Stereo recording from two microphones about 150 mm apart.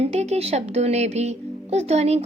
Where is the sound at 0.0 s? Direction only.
45° right (ahead or behind).